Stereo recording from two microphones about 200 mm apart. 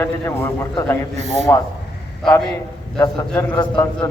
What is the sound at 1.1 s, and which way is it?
Speech, 35° right (ahead or behind).